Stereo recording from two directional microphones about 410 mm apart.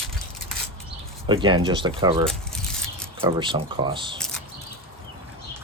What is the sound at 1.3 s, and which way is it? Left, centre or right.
Speech, centre.